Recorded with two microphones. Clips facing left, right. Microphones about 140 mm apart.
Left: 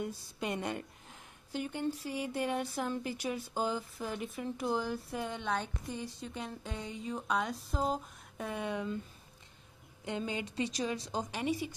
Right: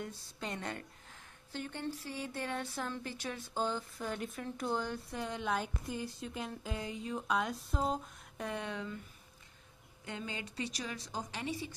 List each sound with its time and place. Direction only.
0.0 s a woman's voice: 15° left (ahead or behind)
10.0 s a woman's voice: 20° left (ahead or behind)